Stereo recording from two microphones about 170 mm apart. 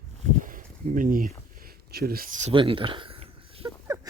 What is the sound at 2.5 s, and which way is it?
Speech, 30° right (ahead or behind).